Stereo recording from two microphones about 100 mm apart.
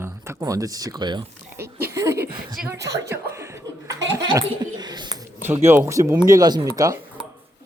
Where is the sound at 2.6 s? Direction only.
35° right (ahead or behind).